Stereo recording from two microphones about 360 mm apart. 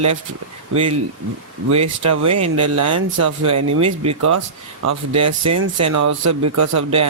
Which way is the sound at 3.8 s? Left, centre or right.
Centre.